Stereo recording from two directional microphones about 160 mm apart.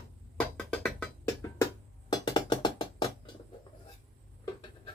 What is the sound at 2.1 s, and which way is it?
Music, 25° left (ahead or behind).